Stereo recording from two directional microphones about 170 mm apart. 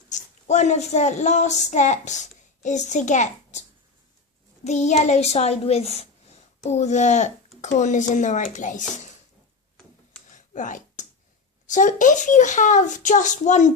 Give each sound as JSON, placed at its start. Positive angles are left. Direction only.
{"t": 0.1, "sound": "a child's voice", "side_deg": 45}
{"t": 4.6, "sound": "a child's voice", "side_deg": 40}
{"t": 9.7, "sound": "tick-tock", "side_deg": 5}
{"t": 10.3, "sound": "a sound", "side_deg": 45}
{"t": 11.6, "sound": "a child's voice", "side_deg": 45}